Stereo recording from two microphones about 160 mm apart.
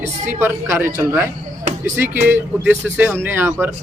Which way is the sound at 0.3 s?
15° right (ahead or behind).